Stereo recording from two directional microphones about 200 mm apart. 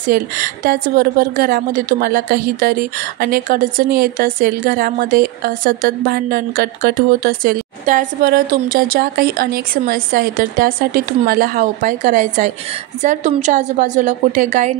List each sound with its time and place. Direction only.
0.0 s a woman's voice: 45° right (ahead or behind)